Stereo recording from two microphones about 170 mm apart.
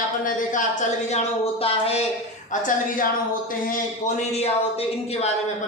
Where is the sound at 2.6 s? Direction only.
55° left (ahead or behind).